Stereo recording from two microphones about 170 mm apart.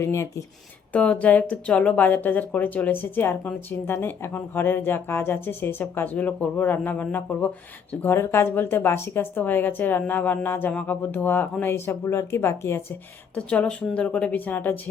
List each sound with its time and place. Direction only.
0.0 s speech: 15° left (ahead or behind)